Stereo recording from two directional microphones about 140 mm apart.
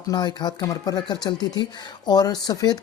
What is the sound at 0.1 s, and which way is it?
Speech, 30° left (ahead or behind).